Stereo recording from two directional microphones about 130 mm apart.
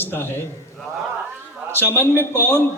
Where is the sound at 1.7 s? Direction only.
15° left (ahead or behind).